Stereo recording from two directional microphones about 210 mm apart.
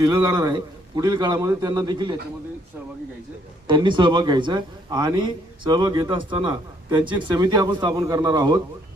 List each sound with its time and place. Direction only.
0.0 s a man's voice: 20° right (ahead or behind)
3.7 s a man's voice: 20° right (ahead or behind)